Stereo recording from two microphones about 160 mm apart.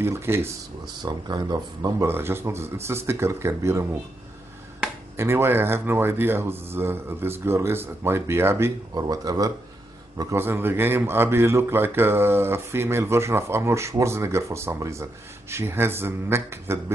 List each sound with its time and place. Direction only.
0.0 s speech: 15° right (ahead or behind)
5.1 s speech: 15° right (ahead or behind)